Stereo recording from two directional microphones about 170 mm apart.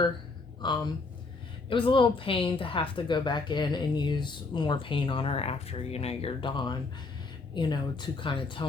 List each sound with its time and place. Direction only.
0.6 s a woman's voice: 25° left (ahead or behind)